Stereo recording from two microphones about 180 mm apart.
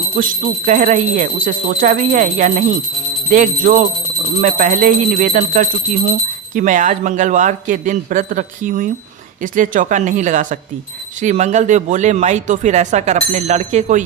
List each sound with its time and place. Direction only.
0.2 s speech: 45° right (ahead or behind)